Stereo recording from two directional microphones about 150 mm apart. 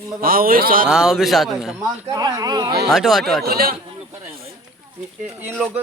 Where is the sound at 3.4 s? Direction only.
90° right.